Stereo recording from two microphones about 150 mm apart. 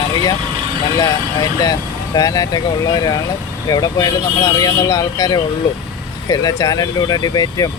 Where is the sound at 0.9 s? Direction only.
25° left (ahead or behind).